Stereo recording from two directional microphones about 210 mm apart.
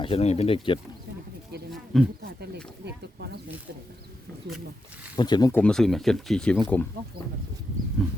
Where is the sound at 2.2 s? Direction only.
50° right (ahead or behind).